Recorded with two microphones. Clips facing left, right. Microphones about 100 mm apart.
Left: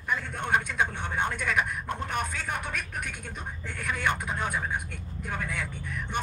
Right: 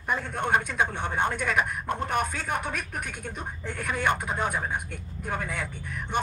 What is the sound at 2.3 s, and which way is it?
Speech, 40° right (ahead or behind).